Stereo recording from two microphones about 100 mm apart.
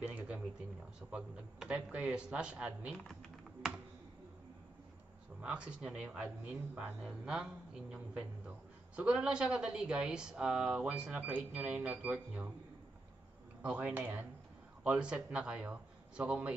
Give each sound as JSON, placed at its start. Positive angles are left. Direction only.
{"t": 0.0, "sound": "a sound", "side_deg": -15}
{"t": 1.1, "sound": "speech", "side_deg": -10}
{"t": 3.1, "sound": "typing", "side_deg": 0}
{"t": 5.4, "sound": "speech", "side_deg": -10}
{"t": 13.6, "sound": "a man's voice", "side_deg": -10}